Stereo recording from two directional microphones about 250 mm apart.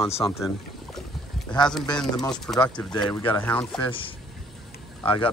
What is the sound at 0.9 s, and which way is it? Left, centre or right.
Boat, centre.